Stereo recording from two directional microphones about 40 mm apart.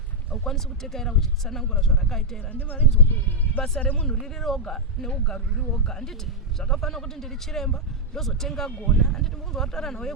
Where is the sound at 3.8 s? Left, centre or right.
Left.